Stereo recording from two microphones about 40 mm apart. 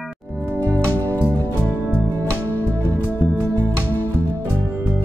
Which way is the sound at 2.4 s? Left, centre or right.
Left.